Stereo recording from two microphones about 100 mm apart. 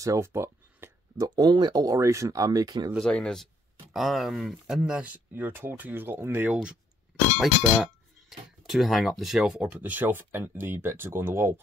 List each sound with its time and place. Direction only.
0.0 s a sound: 30° right (ahead or behind)
1.2 s speech: 45° right (ahead or behind)
3.0 s speech: 10° left (ahead or behind); by 6.6 s 20° right (ahead or behind)
7.3 s speech: 5° right (ahead or behind)
9.8 s speech: 15° right (ahead or behind)